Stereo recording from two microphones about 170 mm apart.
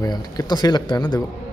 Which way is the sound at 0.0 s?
25° left (ahead or behind).